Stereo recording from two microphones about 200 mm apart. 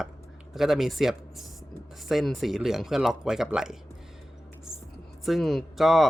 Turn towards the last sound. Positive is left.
turn(degrees=0)  # may be behind; listen again after turning